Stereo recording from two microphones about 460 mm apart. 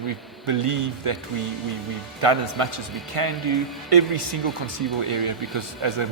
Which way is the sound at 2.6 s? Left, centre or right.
Right.